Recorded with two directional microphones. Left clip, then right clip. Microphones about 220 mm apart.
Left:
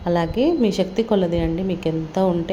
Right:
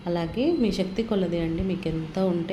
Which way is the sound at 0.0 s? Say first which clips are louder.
Left 7 dB; 20° left (ahead or behind).